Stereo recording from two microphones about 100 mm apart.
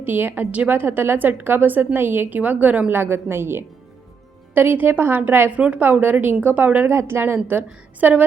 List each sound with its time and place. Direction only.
0.0 s a woman's voice: 20° right (ahead or behind)